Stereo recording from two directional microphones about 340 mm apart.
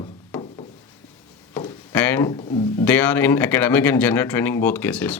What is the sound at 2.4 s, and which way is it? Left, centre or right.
Speech, left.